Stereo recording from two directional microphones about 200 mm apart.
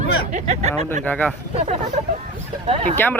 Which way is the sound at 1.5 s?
30° right (ahead or behind).